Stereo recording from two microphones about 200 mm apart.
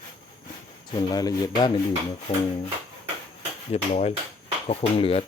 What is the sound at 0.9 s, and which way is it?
Speech, 20° left (ahead or behind).